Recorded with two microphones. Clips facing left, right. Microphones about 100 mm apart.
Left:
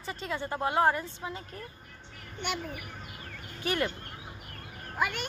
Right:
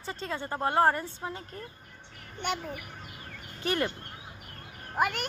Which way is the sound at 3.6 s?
35° right (ahead or behind).